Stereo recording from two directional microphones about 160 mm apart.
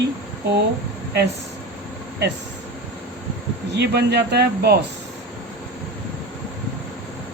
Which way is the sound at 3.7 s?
90° right.